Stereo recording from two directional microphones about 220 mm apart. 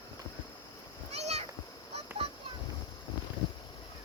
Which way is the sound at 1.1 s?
30° right (ahead or behind).